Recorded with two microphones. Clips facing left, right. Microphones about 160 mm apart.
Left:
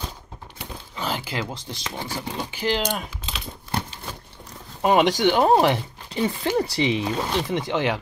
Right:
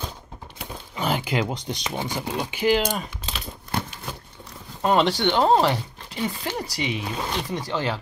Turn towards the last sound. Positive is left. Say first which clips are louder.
# left 3 dB
turn(degrees=20)  # may be behind; listen again after turning